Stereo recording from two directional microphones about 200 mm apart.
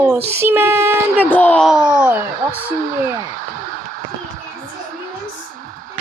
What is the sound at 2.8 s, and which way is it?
Speech, 40° right (ahead or behind).